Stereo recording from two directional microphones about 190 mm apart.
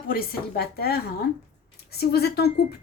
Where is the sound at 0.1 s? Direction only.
50° left (ahead or behind).